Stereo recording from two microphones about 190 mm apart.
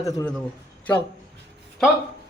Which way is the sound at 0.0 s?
15° left (ahead or behind).